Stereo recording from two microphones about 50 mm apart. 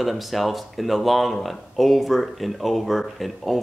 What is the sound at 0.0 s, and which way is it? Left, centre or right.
Speech, centre.